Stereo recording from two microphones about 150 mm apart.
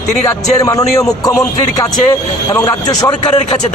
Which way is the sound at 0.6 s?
25° left (ahead or behind).